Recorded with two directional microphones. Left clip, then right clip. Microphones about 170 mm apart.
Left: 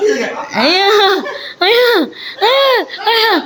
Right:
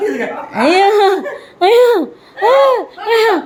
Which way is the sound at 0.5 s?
Centre (ahead or behind).